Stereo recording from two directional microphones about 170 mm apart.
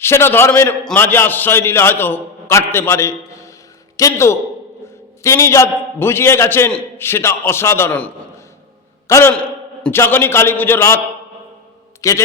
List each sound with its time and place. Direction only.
0.0 s a man's voice: 15° left (ahead or behind)
9.3 s a man's voice: 5° left (ahead or behind)
12.0 s a man's voice: 20° left (ahead or behind)